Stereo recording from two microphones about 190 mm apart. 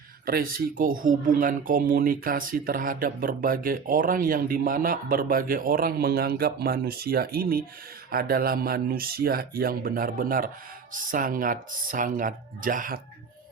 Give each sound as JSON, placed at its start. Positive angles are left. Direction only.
{"t": 0.3, "sound": "speech", "side_deg": -50}